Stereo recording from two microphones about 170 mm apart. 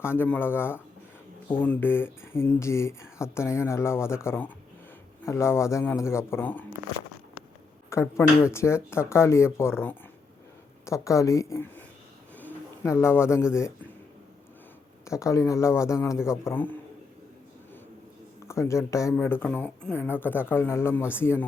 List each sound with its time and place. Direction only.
0.0 s speech: 15° left (ahead or behind)
7.9 s speech: 15° left (ahead or behind)
12.4 s bird: 15° left (ahead or behind)
13.5 s speech: 15° left (ahead or behind)
15.0 s speech: 20° left (ahead or behind)
18.4 s speech: 15° left (ahead or behind)